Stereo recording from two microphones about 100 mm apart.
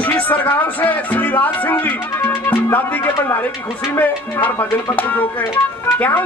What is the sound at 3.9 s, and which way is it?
Speech, 20° left (ahead or behind).